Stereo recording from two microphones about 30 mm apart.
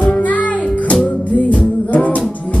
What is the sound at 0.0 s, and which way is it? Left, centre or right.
Music, left.